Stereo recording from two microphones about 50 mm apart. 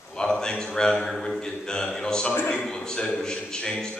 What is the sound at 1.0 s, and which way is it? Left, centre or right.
Speech, centre.